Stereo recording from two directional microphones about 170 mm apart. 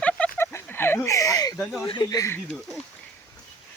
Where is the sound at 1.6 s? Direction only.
Centre (ahead or behind).